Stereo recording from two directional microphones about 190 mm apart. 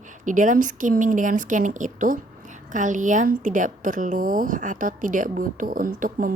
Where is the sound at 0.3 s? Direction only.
45° right (ahead or behind).